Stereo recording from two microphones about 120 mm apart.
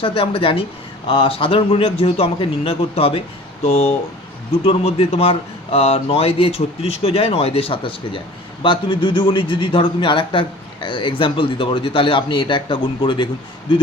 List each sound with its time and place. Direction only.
0.0 s a man's voice: 50° left (ahead or behind)